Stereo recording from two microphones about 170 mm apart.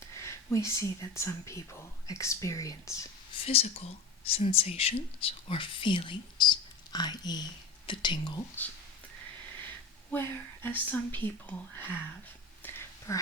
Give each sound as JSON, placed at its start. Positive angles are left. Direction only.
{"t": 0.2, "sound": "speech", "side_deg": 15}
{"t": 3.4, "sound": "speech", "side_deg": 35}
{"t": 8.6, "sound": "speech", "side_deg": 10}
{"t": 10.1, "sound": "speech", "side_deg": 10}
{"t": 12.6, "sound": "a sound", "side_deg": 10}
{"t": 13.1, "sound": "speech", "side_deg": 20}